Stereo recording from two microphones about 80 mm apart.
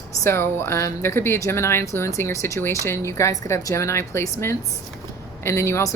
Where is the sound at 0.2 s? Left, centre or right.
Left.